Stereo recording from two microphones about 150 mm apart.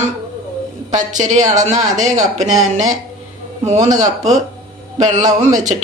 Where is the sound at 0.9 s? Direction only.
55° right (ahead or behind).